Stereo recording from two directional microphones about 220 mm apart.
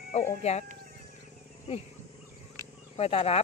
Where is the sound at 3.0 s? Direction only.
25° left (ahead or behind).